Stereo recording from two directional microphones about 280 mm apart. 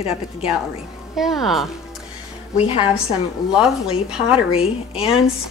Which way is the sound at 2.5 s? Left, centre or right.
Left.